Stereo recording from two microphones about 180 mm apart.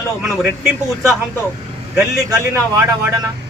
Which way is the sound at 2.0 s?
10° right (ahead or behind).